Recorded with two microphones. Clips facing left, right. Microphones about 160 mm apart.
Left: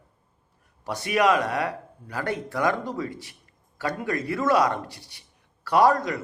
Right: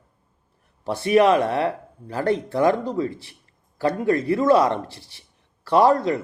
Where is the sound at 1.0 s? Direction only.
30° right (ahead or behind).